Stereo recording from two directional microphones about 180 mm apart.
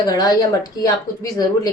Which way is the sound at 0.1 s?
20° left (ahead or behind).